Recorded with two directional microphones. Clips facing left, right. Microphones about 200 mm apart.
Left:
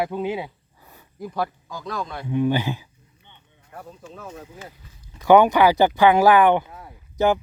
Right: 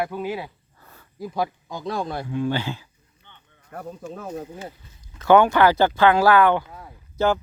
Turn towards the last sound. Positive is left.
turn(degrees=15)  # may be behind; listen again after turning